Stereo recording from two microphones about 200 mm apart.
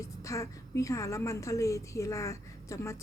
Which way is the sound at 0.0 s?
15° left (ahead or behind).